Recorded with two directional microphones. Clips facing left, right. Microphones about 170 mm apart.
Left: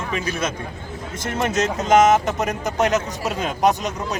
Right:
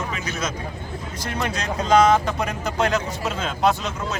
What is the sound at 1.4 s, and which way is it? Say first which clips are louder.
A man's voice: left 5 dB; 20° left (ahead or behind).